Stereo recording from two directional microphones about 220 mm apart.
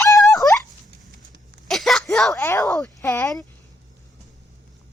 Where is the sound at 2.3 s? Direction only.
15° left (ahead or behind).